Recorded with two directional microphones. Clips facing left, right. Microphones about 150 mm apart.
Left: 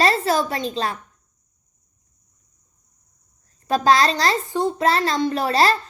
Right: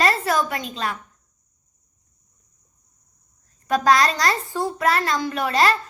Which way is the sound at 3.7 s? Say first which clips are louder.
Left 1 dB; 30° left (ahead or behind).